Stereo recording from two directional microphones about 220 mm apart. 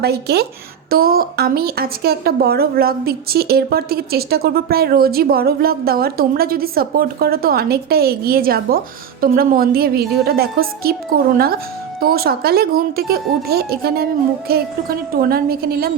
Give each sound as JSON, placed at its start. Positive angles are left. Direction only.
{"t": 0.0, "sound": "a woman's voice", "side_deg": -45}